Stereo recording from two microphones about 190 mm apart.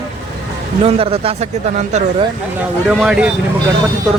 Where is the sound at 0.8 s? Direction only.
30° right (ahead or behind).